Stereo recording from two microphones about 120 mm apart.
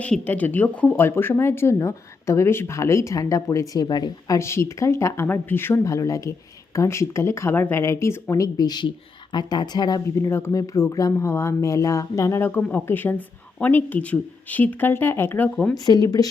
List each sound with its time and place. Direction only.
0.0 s speech: 10° left (ahead or behind); by 4.4 s 35° left (ahead or behind)
4.4 s a woman's voice: 20° left (ahead or behind)
10.2 s speech: 20° left (ahead or behind)
15.7 s a woman's voice: 35° left (ahead or behind)